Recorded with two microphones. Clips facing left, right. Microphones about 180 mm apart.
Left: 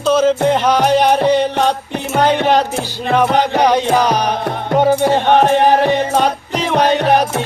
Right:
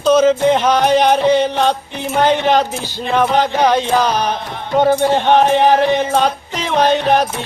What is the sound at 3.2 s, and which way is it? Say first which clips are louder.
Music: even; 15° left (ahead or behind).